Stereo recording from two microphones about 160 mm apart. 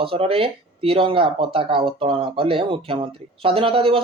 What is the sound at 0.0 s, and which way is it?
Speech, 35° right (ahead or behind).